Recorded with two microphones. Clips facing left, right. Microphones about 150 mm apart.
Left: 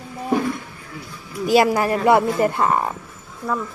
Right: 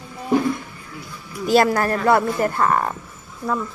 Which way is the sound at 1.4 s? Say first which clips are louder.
Even; 10° left (ahead or behind).